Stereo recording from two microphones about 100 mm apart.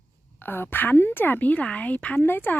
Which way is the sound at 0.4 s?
20° left (ahead or behind).